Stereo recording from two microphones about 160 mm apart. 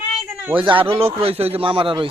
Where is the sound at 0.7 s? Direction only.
35° right (ahead or behind).